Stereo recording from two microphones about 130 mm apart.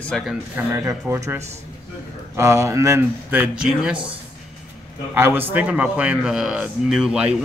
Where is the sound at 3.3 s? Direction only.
10° right (ahead or behind).